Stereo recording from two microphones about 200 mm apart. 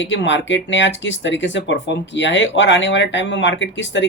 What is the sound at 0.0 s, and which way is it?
Speech, 65° left (ahead or behind).